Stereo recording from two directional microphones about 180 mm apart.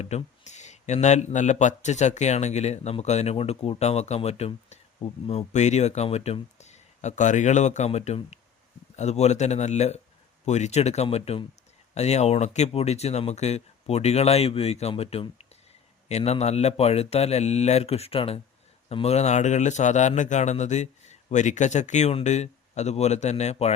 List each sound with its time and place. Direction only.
0.0 s speech: 35° left (ahead or behind)